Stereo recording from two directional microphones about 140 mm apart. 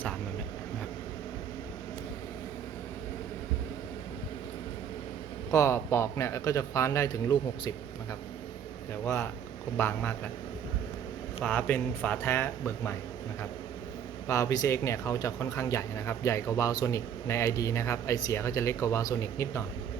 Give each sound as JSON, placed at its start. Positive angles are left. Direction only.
{"t": 5.5, "sound": "speech", "side_deg": 20}
{"t": 9.7, "sound": "speech", "side_deg": 15}
{"t": 11.4, "sound": "speech", "side_deg": 10}
{"t": 14.3, "sound": "speech", "side_deg": 20}